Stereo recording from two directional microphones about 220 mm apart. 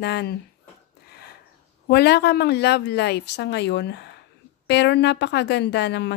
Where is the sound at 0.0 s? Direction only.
50° left (ahead or behind).